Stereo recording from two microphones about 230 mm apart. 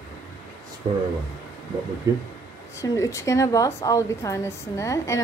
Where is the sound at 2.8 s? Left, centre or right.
Centre.